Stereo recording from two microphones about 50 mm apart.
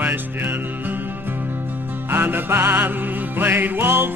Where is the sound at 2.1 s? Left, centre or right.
Right.